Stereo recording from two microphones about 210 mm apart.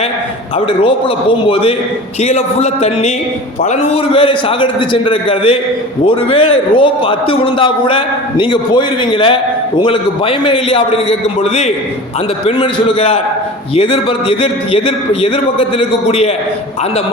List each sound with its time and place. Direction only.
2.2 s a man's voice: 30° left (ahead or behind)